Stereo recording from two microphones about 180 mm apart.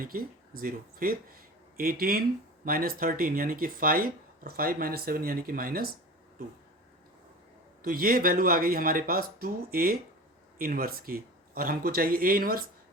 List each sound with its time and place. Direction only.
0.0 s speech: 55° right (ahead or behind)
7.8 s speech: 55° right (ahead or behind)